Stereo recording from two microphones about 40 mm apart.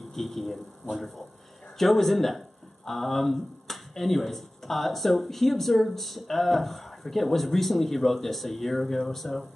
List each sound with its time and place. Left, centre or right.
0.1 s speech: centre